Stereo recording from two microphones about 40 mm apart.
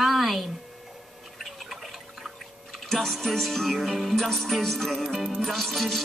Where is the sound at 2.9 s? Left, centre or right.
Centre.